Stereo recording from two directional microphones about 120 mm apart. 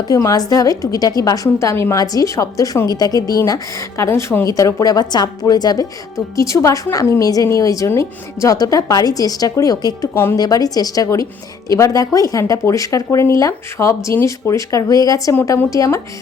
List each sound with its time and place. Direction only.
0.1 s a woman's voice: 30° left (ahead or behind)